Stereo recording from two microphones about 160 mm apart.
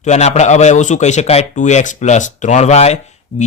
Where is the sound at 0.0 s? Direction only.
45° left (ahead or behind).